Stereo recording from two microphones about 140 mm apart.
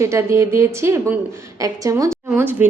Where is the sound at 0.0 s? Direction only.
20° right (ahead or behind).